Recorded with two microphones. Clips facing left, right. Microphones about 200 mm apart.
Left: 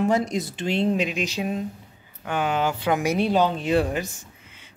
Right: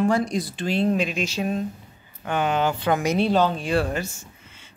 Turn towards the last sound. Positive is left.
turn(degrees=15)  # may be behind; listen again after turning